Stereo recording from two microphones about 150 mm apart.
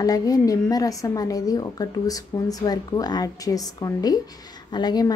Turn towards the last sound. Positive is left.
turn(degrees=25)  # may be behind; listen again after turning